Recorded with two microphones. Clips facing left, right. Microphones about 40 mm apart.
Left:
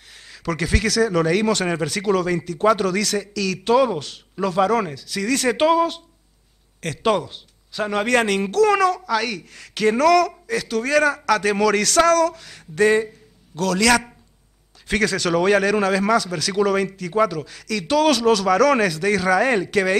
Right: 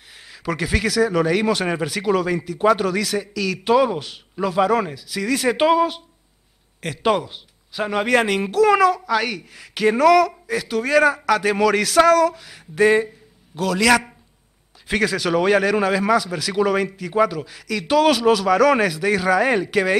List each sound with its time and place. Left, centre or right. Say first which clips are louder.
0.1 s a man's voice: even; centre